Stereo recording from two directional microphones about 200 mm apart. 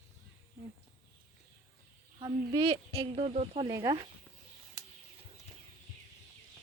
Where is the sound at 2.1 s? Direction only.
25° right (ahead or behind).